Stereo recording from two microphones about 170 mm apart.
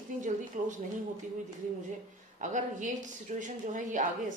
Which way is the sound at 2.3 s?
45° right (ahead or behind).